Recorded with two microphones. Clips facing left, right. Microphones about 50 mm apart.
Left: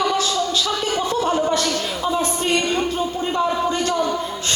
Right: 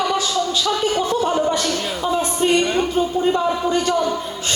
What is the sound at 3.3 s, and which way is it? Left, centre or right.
Speech, centre.